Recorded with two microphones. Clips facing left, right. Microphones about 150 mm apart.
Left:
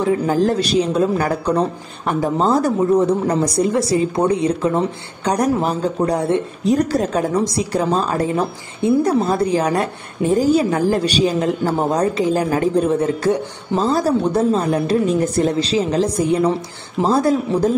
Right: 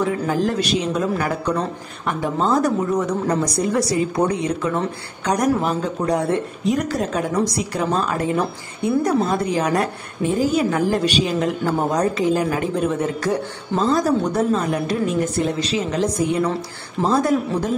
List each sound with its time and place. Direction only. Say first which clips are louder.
0.0 s a woman's voice: left 4 dB; 35° left (ahead or behind)